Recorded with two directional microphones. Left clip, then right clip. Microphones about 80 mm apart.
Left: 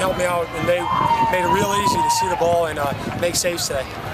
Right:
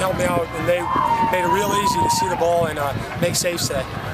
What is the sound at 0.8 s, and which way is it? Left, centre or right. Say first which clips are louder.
Speech: left 1 dB; left.